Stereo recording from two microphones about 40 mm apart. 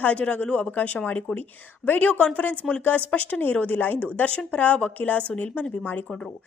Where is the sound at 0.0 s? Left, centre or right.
Left.